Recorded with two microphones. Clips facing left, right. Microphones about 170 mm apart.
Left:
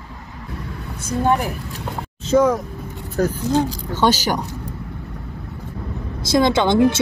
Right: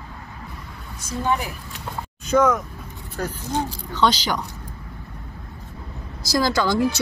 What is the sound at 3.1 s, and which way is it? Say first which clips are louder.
Speech: left 8 dB; 45° left (ahead or behind).